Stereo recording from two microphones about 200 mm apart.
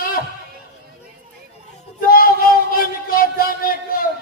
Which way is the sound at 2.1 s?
45° left (ahead or behind).